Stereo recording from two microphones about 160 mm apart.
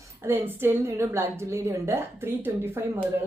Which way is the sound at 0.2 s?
15° right (ahead or behind).